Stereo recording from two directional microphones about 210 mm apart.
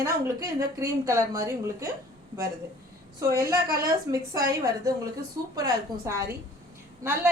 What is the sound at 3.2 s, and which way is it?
A woman's voice, 15° right (ahead or behind).